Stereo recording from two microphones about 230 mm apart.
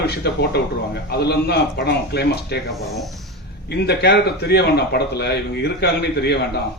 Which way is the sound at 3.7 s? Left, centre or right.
Left.